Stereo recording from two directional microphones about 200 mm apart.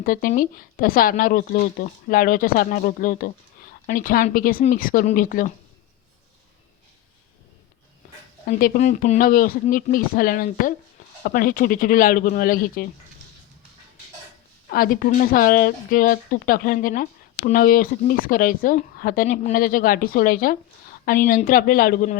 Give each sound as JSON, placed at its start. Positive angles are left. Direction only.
{"t": 0.0, "sound": "speech", "side_deg": 45}
{"t": 8.4, "sound": "speech", "side_deg": 40}
{"t": 14.7, "sound": "speech", "side_deg": 45}